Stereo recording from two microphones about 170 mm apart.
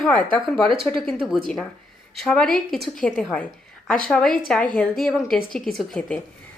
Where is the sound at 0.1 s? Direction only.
5° left (ahead or behind).